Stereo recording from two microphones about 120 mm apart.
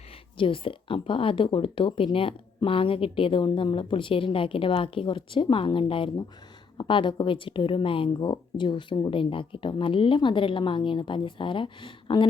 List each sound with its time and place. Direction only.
0.3 s speech: 45° left (ahead or behind)